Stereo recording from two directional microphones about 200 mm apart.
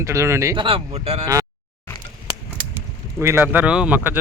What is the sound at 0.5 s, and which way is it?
Speech, 25° right (ahead or behind).